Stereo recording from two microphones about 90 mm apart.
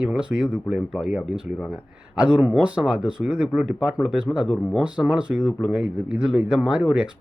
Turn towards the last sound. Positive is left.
turn(degrees=-10)  # may be behind; listen again after turning